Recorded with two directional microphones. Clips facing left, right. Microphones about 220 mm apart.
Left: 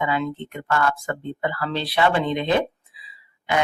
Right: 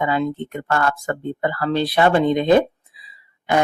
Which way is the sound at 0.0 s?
40° right (ahead or behind).